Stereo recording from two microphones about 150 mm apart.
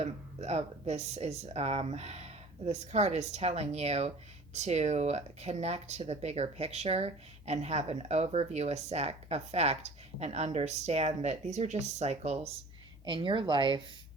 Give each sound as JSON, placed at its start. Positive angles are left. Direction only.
{"t": 0.0, "sound": "speech", "side_deg": -45}
{"t": 13.1, "sound": "speech", "side_deg": -35}